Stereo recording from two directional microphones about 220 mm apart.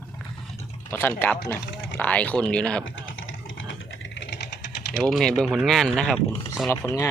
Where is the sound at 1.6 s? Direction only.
55° left (ahead or behind).